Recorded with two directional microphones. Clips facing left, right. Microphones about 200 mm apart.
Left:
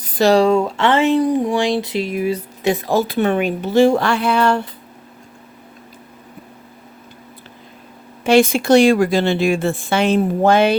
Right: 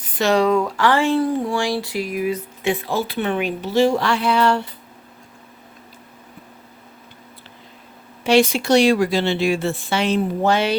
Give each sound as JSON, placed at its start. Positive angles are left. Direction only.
{"t": 0.0, "sound": "speech", "side_deg": 35}
{"t": 8.2, "sound": "speech", "side_deg": 50}